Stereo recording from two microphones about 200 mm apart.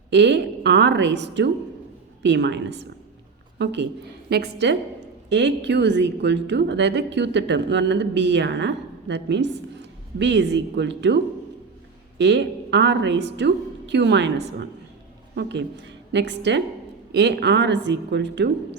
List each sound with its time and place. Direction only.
0.1 s a woman's voice: 55° right (ahead or behind)